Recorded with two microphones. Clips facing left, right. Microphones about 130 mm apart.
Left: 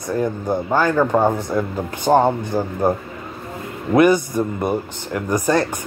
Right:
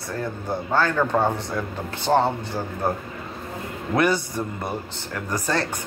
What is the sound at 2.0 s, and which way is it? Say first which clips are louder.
Speech: left 5 dB; 45° left (ahead or behind).